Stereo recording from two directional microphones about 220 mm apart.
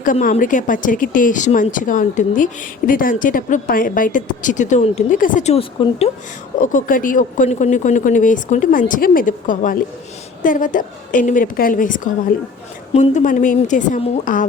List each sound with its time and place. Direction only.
0.0 s speech: 35° left (ahead or behind)
6.6 s speech: 35° left (ahead or behind)